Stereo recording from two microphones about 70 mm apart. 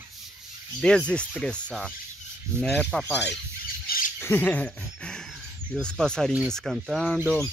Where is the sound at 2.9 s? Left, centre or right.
Centre.